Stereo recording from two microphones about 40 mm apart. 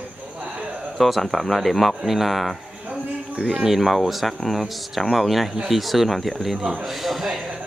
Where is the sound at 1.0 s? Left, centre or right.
Centre.